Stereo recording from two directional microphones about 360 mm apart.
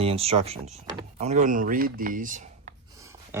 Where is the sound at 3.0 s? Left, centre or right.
Centre.